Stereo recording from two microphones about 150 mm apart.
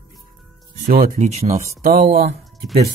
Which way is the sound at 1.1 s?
45° right (ahead or behind).